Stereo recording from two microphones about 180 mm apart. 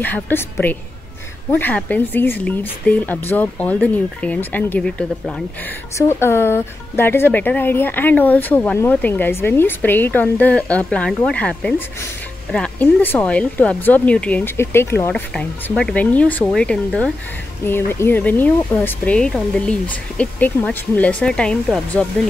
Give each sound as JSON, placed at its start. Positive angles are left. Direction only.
{"t": 0.0, "sound": "speech", "side_deg": 10}